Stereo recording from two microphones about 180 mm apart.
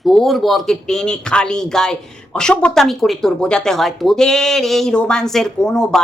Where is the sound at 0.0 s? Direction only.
Centre (ahead or behind).